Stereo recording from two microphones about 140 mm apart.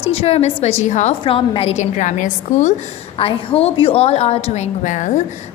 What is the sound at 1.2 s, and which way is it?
A woman's voice, 40° left (ahead or behind).